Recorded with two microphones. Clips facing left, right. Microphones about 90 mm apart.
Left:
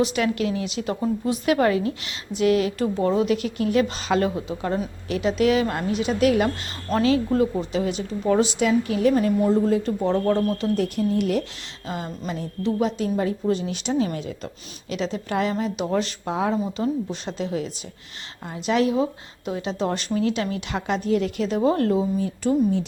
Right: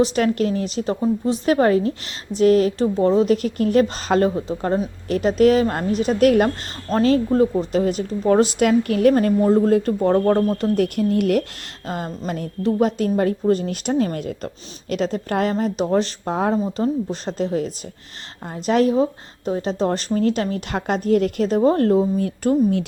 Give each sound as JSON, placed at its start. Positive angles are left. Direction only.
{"t": 0.0, "sound": "a woman's voice", "side_deg": -40}
{"t": 6.9, "sound": "speech", "side_deg": -25}
{"t": 7.7, "sound": "a woman's voice", "side_deg": -45}
{"t": 10.6, "sound": "a woman's voice", "side_deg": -60}
{"t": 11.9, "sound": "a woman's voice", "side_deg": -45}
{"t": 22.2, "sound": "a woman's voice", "side_deg": -65}